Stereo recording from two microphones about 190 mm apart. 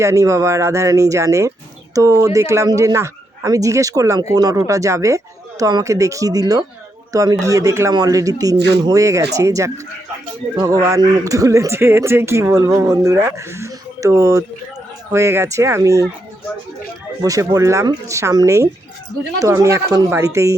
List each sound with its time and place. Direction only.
0.0 s speech: 15° right (ahead or behind)
17.2 s speech: 20° right (ahead or behind)